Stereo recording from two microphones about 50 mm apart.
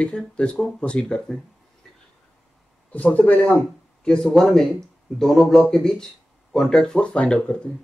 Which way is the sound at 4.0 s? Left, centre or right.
Centre.